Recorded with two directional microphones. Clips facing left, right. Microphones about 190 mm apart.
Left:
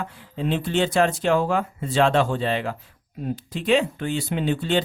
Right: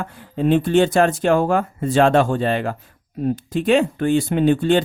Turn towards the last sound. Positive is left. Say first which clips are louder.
# right 7 dB
turn(degrees=-50)  # may be behind; listen again after turning